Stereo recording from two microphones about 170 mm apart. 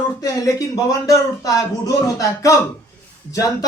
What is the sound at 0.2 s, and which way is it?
Speech, 20° left (ahead or behind).